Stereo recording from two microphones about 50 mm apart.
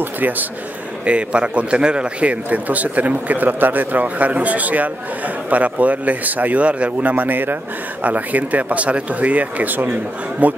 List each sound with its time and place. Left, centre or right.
0.0 s speech: right
1.0 s a man's voice: right